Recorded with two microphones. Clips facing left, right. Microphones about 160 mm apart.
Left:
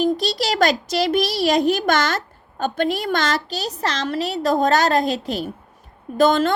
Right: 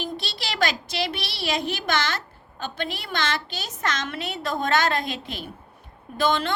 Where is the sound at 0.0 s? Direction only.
40° left (ahead or behind).